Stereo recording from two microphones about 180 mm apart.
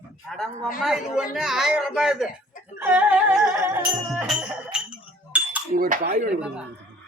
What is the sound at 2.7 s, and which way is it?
Singing, 10° right (ahead or behind).